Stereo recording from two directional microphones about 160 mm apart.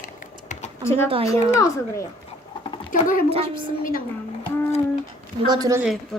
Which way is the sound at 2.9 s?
60° left (ahead or behind).